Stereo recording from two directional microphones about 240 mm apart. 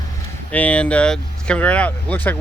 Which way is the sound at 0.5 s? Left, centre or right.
Centre.